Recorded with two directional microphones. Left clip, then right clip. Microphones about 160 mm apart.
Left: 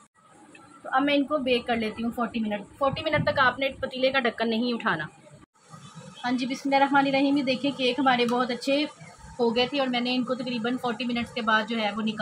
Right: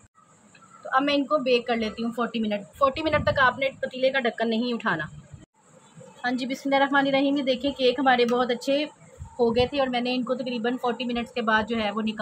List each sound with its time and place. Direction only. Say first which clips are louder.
0.8 s a woman's voice: right 1 dB; 20° right (ahead or behind)
2.5 s a woman's voice: right 5 dB; 35° right (ahead or behind); by 5.1 s 15° right (ahead or behind)
6.2 s a woman's voice: right 1 dB; 50° right (ahead or behind)
9.4 s a woman's voice: right 2 dB; 20° right (ahead or behind)